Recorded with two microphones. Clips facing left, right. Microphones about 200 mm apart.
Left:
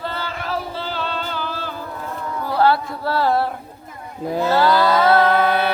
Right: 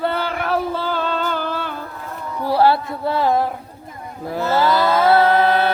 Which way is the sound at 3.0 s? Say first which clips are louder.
Right 1 dB; 20° right (ahead or behind).